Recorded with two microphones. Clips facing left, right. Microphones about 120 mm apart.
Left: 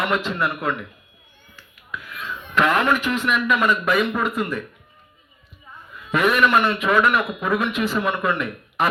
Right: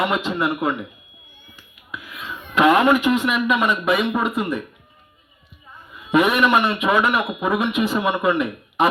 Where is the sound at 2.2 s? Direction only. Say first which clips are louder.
Right 4 dB; 10° right (ahead or behind).